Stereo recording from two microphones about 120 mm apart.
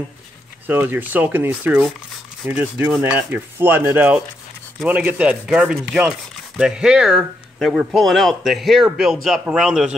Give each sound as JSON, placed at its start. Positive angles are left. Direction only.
{"t": 0.7, "sound": "speech", "side_deg": -15}